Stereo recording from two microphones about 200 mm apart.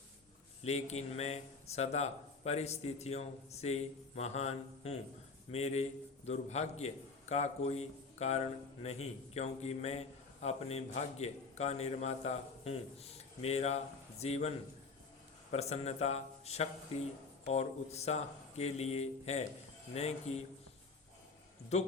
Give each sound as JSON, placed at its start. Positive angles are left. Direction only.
{"t": 0.6, "sound": "a man's voice", "side_deg": 35}
{"t": 15.5, "sound": "a man's voice", "side_deg": 30}